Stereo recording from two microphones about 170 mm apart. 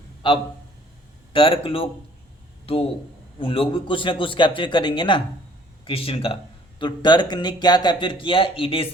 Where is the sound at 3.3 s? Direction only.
30° left (ahead or behind).